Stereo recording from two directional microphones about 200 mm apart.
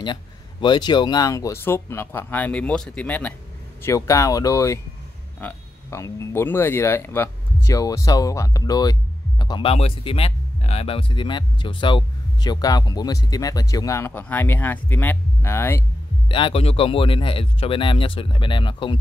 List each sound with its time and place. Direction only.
0.0 s speech: 20° left (ahead or behind)
16.3 s speech: 25° left (ahead or behind)